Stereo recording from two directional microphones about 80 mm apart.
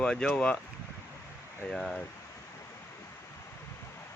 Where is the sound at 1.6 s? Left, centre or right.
Centre.